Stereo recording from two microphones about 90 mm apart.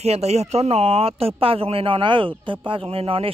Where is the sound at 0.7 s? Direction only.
90° right; by 2.6 s 70° right (ahead or behind).